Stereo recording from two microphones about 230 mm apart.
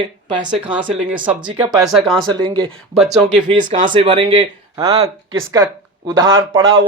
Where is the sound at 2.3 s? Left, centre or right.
Centre.